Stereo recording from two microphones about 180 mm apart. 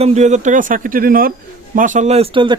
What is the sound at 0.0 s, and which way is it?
Speech, 40° right (ahead or behind).